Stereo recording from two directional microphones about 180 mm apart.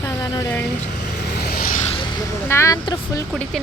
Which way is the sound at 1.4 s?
55° left (ahead or behind).